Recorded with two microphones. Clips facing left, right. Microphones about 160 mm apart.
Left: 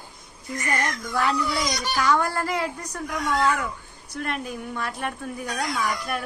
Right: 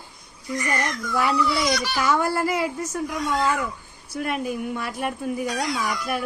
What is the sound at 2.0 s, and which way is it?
Speech, 10° right (ahead or behind).